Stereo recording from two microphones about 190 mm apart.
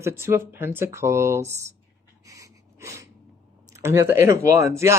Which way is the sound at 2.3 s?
15° right (ahead or behind).